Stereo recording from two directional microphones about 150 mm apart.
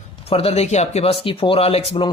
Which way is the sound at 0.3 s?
40° left (ahead or behind).